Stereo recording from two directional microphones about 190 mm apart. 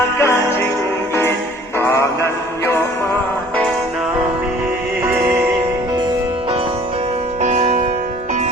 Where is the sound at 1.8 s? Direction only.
15° left (ahead or behind).